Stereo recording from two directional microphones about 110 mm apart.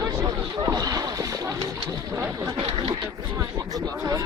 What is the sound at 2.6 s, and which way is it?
Speech, 50° right (ahead or behind).